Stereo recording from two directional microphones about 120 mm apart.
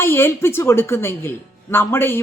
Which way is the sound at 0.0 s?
20° left (ahead or behind).